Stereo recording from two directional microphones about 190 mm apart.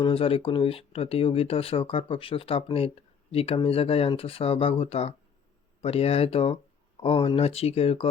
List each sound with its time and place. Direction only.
0.0 s speech: 30° left (ahead or behind)